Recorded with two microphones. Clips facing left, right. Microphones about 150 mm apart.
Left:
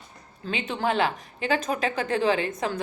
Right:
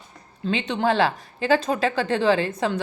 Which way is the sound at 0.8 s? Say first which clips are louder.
Right 3 dB; 35° right (ahead or behind).